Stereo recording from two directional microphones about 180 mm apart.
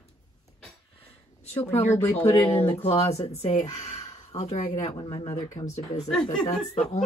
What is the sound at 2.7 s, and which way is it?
Speech, 35° left (ahead or behind).